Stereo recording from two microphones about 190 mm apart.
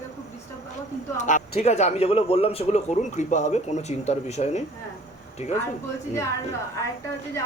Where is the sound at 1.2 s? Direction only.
35° left (ahead or behind).